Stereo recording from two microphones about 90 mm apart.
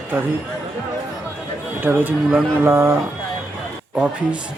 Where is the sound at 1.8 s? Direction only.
20° right (ahead or behind).